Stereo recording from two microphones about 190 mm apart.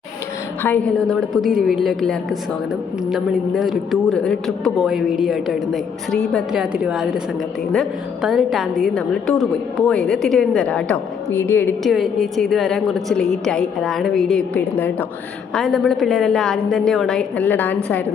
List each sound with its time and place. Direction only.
0.6 s a man's voice: 5° left (ahead or behind)
11.8 s a man's voice: centre (ahead or behind)